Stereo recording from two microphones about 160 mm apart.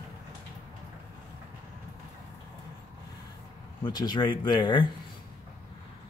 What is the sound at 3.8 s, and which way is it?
Speech, 25° left (ahead or behind).